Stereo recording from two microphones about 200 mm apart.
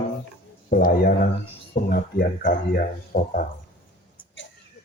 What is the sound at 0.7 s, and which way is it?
Speech, 45° left (ahead or behind).